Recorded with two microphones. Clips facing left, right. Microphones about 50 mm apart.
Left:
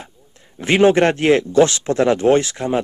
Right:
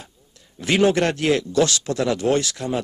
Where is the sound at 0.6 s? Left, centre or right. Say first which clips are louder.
Left 5 dB; left.